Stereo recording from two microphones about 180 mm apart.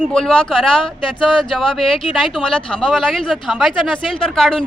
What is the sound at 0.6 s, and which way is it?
Speech, 30° left (ahead or behind).